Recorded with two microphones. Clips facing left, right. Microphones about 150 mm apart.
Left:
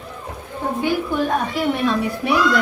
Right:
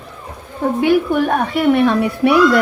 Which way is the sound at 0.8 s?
65° right (ahead or behind).